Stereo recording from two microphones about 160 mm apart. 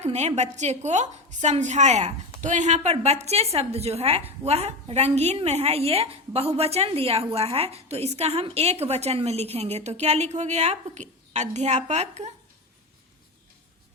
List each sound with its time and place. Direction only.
0.0 s a woman's voice: 45° right (ahead or behind)